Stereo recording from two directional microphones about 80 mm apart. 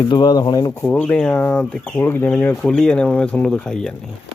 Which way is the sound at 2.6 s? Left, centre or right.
Centre.